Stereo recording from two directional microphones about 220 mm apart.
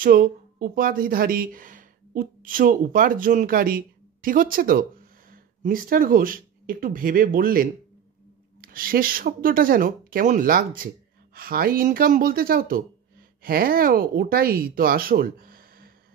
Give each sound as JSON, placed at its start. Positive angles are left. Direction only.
{"t": 0.0, "sound": "speech", "side_deg": -40}